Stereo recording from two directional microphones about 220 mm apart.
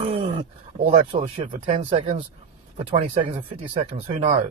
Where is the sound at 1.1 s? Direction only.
30° right (ahead or behind).